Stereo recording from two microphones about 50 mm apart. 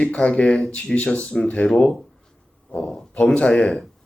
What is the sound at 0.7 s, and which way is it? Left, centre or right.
Speech, left.